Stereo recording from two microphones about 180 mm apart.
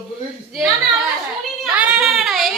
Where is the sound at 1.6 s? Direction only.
5° right (ahead or behind).